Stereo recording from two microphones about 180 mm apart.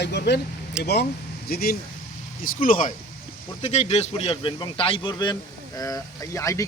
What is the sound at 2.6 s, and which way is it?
A man's voice, 50° left (ahead or behind).